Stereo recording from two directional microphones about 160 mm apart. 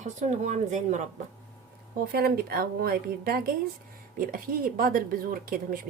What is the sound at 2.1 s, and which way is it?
Speech, 75° right (ahead or behind).